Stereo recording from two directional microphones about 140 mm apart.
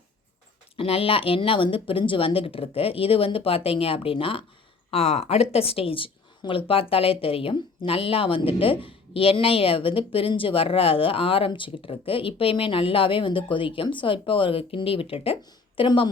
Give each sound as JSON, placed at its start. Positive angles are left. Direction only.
{"t": 0.8, "sound": "a woman's voice", "side_deg": 40}